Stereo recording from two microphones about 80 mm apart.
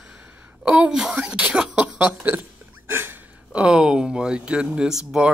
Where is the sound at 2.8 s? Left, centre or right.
Right.